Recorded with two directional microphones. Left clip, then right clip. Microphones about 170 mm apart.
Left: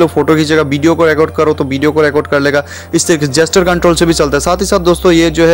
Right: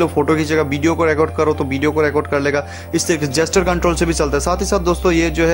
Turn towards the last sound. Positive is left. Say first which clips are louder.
# left 7 dB
turn(degrees=25)  # may be behind; listen again after turning